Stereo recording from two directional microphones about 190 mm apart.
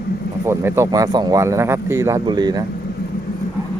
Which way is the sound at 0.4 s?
15° right (ahead or behind).